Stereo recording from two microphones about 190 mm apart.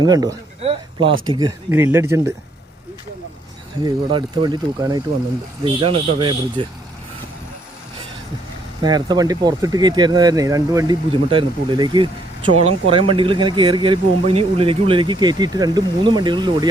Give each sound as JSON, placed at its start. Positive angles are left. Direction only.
{"t": 0.0, "sound": "speech", "side_deg": -20}
{"t": 0.6, "sound": "a sound", "side_deg": -30}
{"t": 1.3, "sound": "speech", "side_deg": -25}
{"t": 1.7, "sound": "speech", "side_deg": -10}
{"t": 3.8, "sound": "speech", "side_deg": -25}
{"t": 8.8, "sound": "speech", "side_deg": -20}